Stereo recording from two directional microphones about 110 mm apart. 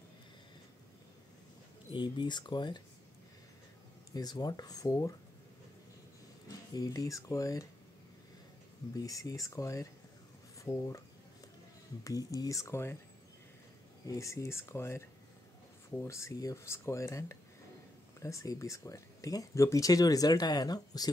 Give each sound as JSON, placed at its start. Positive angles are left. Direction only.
{"t": 1.9, "sound": "speech", "side_deg": 45}
{"t": 4.1, "sound": "speech", "side_deg": 35}
{"t": 6.7, "sound": "speech", "side_deg": 35}
{"t": 8.9, "sound": "speech", "side_deg": 30}
{"t": 12.0, "sound": "speech", "side_deg": 30}
{"t": 14.0, "sound": "speech", "side_deg": 30}